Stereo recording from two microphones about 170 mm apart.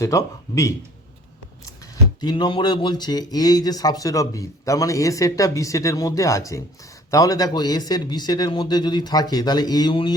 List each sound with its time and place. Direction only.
0.0 s speech: 20° left (ahead or behind)